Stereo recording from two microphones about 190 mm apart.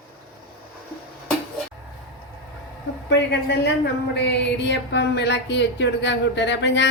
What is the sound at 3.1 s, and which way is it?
Speech, 60° left (ahead or behind).